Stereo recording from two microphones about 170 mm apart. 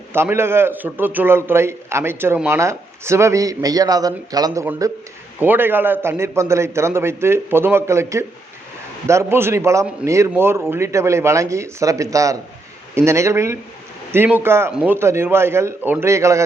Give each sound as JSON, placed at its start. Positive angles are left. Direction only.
{"t": 0.1, "sound": "a man's voice", "side_deg": -15}
{"t": 4.6, "sound": "a man's voice", "side_deg": -10}